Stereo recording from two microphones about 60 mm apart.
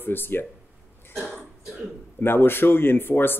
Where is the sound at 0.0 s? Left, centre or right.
Left.